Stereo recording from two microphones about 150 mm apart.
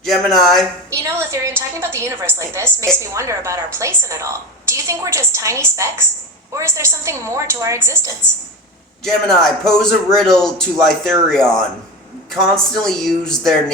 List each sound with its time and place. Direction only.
0.0 s a man's voice: centre (ahead or behind)
0.9 s a woman's voice: 20° right (ahead or behind)
9.0 s a man's voice: centre (ahead or behind)